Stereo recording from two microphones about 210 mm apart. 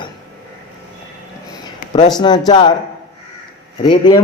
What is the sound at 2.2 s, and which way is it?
Speech, 20° left (ahead or behind).